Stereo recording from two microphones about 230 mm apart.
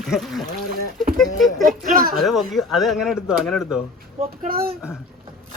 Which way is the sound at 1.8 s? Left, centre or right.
Right.